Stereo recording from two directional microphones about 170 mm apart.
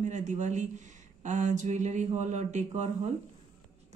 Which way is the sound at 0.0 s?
45° right (ahead or behind).